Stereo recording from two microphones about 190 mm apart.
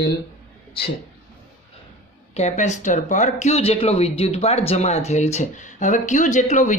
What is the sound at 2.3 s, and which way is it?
Speech, 35° left (ahead or behind).